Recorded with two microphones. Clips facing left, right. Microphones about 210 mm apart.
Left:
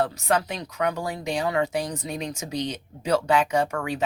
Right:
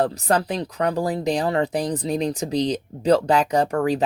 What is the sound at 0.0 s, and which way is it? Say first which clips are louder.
Speech: right 3 dB; 35° right (ahead or behind).